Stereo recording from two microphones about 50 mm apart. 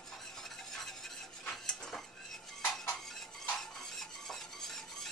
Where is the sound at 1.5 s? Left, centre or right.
Centre.